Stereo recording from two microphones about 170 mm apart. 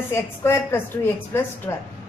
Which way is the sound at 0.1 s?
15° left (ahead or behind).